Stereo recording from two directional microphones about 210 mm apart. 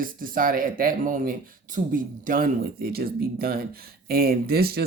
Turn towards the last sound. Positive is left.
turn(degrees=-45)  # may be behind; listen again after turning